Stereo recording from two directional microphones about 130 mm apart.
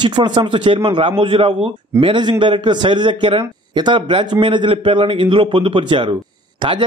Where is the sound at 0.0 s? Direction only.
35° right (ahead or behind).